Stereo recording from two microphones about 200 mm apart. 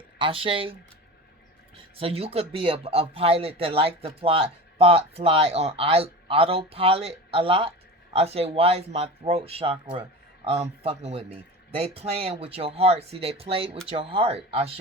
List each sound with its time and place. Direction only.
0.2 s speech: 25° right (ahead or behind)
2.0 s speech: 30° right (ahead or behind)